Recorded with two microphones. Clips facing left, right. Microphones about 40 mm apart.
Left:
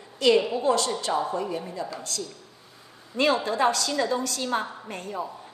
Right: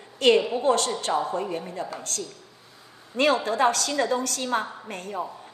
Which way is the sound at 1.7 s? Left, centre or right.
Right.